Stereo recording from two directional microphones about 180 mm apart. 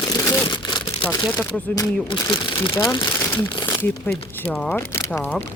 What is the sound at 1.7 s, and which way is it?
Speech, 25° left (ahead or behind).